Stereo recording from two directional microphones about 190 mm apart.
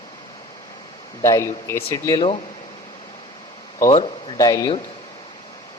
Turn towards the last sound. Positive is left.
turn(degrees=15)  # may be behind; listen again after turning